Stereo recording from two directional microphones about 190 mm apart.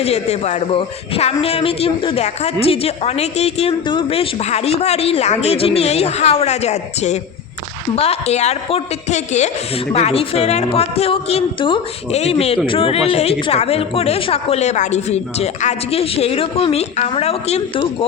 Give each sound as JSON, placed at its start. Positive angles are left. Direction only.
{"t": 0.0, "sound": "a man's voice", "side_deg": 35}